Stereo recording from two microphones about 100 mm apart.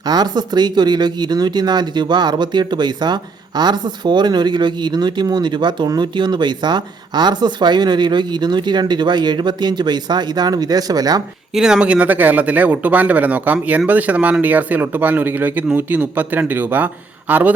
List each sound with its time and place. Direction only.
0.0 s speech: 45° right (ahead or behind)
11.5 s speech: 5° right (ahead or behind)